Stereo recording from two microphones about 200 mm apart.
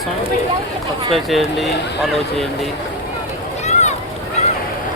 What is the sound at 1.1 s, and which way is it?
Speech, centre (ahead or behind).